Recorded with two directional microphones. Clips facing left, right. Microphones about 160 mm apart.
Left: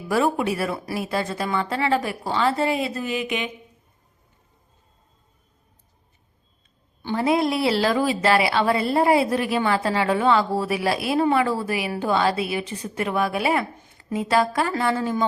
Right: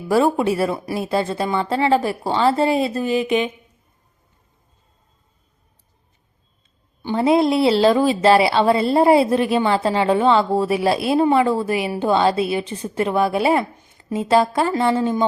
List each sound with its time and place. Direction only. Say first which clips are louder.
0.1 s a woman's voice: right 5 dB; 30° right (ahead or behind)
7.0 s a woman's voice: right 5 dB; 20° right (ahead or behind)